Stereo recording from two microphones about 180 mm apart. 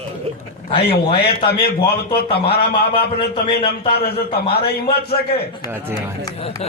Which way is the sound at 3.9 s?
60° left (ahead or behind).